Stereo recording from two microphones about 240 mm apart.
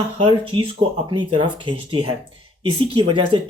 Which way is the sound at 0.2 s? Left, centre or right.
Right.